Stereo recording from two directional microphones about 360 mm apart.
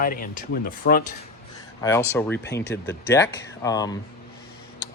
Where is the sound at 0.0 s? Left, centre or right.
Left.